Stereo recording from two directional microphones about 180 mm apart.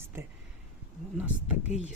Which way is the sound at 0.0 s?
10° right (ahead or behind).